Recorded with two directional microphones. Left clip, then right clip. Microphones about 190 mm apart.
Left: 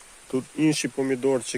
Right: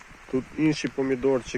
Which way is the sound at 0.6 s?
40° left (ahead or behind).